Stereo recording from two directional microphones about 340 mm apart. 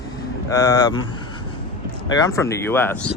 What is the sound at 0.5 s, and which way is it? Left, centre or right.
Speech, centre.